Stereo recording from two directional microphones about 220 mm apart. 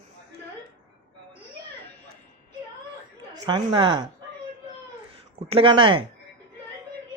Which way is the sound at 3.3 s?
20° right (ahead or behind).